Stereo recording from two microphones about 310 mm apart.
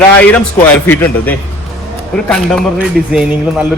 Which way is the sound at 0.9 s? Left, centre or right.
Centre.